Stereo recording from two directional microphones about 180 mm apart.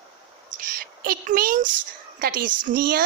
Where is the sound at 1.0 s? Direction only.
50° right (ahead or behind).